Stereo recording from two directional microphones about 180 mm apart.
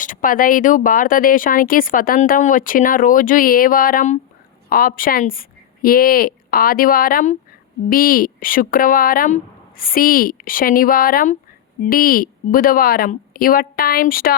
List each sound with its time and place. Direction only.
0.0 s speech: 50° left (ahead or behind)